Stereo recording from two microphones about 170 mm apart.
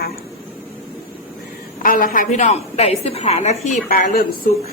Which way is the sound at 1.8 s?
55° left (ahead or behind).